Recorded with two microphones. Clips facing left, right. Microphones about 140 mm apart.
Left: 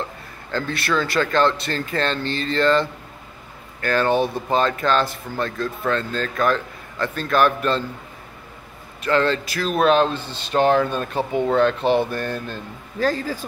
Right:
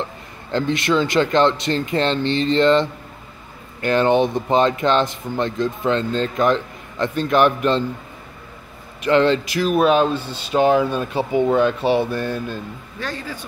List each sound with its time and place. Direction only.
0.0 s speech: 20° right (ahead or behind)
9.0 s speech: 20° right (ahead or behind)
13.0 s speech: 40° left (ahead or behind)